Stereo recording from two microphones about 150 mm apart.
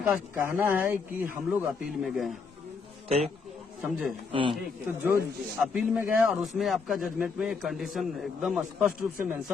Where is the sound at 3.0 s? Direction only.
45° right (ahead or behind).